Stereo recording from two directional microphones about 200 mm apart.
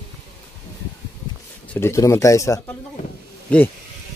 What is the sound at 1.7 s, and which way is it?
Speech, 15° left (ahead or behind).